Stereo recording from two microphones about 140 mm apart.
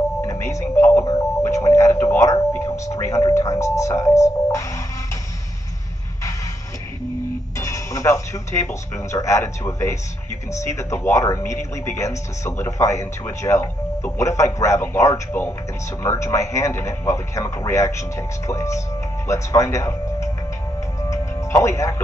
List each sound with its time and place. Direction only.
0.2 s speech: 20° left (ahead or behind)
7.5 s music: 20° left (ahead or behind)
8.9 s speech: 20° left (ahead or behind)
21.0 s music: 20° left (ahead or behind)